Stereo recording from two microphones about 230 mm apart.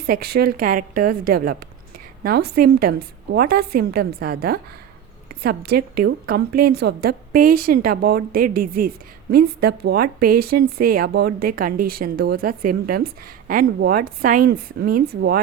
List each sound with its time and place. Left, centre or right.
0.0 s a woman's voice: right